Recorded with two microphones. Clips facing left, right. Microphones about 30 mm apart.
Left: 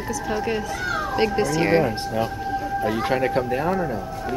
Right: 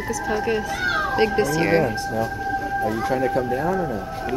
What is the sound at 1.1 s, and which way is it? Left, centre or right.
Speech, centre.